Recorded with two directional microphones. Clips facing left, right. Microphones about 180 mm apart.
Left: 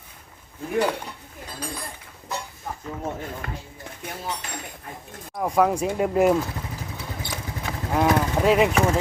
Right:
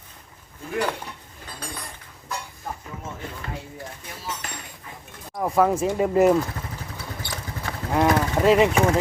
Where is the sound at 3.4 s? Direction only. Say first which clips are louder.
Right 1 dB; 60° left (ahead or behind).